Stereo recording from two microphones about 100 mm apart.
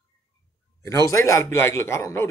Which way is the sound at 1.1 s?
30° left (ahead or behind).